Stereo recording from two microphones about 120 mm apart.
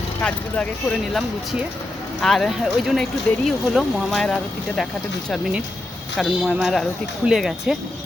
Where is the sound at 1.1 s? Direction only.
Centre (ahead or behind).